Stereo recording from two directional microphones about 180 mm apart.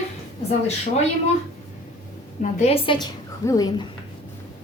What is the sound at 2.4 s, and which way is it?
A woman's voice, 40° left (ahead or behind).